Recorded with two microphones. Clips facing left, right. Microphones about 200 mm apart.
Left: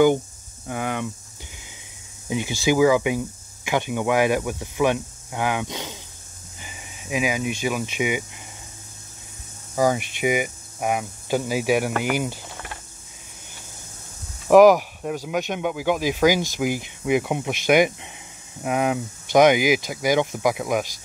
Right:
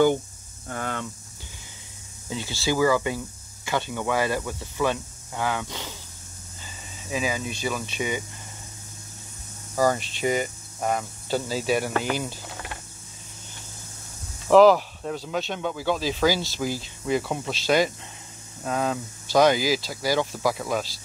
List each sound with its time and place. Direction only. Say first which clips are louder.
0.7 s speech: left 4 dB; 10° left (ahead or behind)
2.2 s speech: left 5 dB; 15° left (ahead or behind)
9.8 s speech: left 2 dB; 15° left (ahead or behind)
14.5 s speech: left 3 dB; 15° left (ahead or behind)